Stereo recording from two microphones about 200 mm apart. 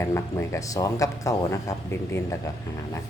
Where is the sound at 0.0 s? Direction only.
15° left (ahead or behind).